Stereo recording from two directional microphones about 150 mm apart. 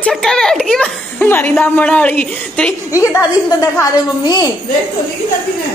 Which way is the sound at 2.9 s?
20° left (ahead or behind).